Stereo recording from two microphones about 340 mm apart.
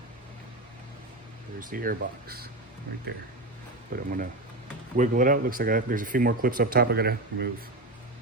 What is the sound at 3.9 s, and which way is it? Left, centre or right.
Speech, right.